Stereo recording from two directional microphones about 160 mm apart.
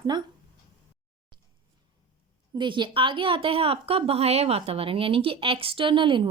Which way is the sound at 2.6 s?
30° right (ahead or behind).